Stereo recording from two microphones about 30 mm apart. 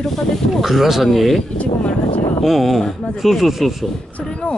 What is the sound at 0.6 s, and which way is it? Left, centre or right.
Speech, centre.